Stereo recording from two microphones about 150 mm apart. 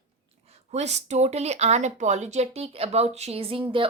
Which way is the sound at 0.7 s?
50° right (ahead or behind).